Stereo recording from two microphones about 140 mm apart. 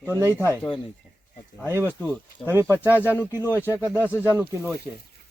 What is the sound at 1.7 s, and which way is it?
Speech, 15° right (ahead or behind).